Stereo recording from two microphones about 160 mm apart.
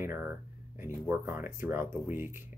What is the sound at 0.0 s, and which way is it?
Speech, 15° right (ahead or behind).